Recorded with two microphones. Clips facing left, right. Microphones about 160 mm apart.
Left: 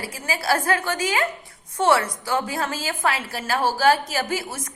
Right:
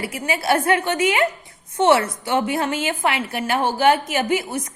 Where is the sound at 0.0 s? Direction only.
25° right (ahead or behind).